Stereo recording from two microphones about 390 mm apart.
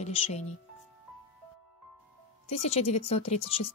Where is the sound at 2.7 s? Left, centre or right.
Centre.